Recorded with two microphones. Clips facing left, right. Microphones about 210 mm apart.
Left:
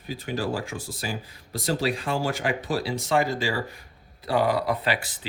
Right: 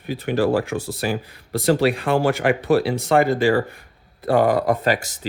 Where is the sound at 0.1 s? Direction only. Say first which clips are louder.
Right 9 dB; 65° right (ahead or behind).